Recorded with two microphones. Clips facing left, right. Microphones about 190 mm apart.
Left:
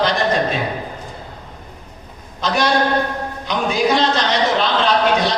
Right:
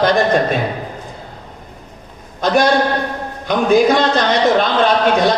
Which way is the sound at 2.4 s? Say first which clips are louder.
Right 4 dB; 50° right (ahead or behind).